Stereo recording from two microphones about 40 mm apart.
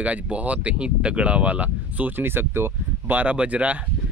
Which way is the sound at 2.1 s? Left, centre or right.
Right.